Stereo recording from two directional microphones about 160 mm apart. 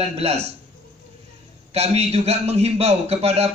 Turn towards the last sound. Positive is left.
turn(degrees=-40)  # may be behind; listen again after turning